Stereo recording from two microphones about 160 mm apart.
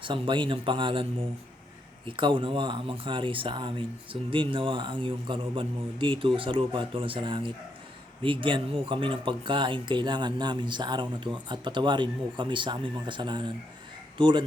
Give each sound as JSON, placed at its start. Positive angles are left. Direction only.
{"t": 0.0, "sound": "speech", "side_deg": -30}
{"t": 2.0, "sound": "speech", "side_deg": -30}